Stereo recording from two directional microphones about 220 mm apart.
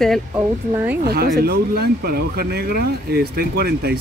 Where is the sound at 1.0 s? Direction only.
45° right (ahead or behind).